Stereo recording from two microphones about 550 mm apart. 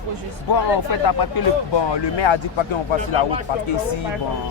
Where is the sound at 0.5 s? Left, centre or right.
Left.